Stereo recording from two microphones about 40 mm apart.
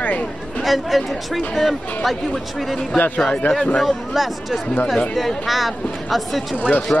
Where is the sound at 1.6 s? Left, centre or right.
Centre.